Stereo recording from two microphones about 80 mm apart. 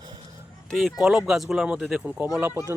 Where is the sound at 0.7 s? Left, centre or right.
Centre.